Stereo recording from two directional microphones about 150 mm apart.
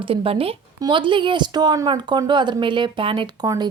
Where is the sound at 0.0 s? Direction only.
35° right (ahead or behind).